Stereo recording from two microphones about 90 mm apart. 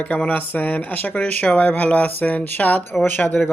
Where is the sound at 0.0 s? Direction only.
15° left (ahead or behind).